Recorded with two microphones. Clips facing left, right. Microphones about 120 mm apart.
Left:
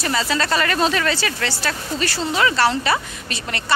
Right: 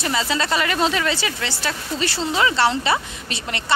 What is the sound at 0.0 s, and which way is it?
A woman's voice, 20° right (ahead or behind).